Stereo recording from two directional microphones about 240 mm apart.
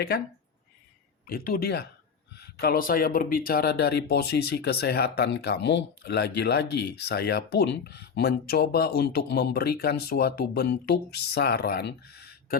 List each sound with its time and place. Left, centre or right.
1.3 s speech: left